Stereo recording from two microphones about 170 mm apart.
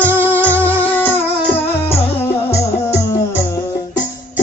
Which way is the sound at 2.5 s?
15° left (ahead or behind).